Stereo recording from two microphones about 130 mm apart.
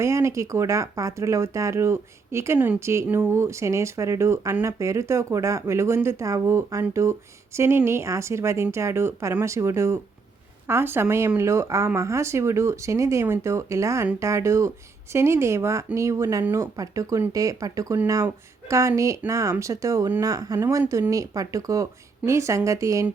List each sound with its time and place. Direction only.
0.0 s speech: 25° right (ahead or behind)